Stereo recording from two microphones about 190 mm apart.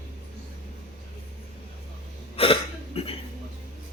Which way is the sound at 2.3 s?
30° left (ahead or behind).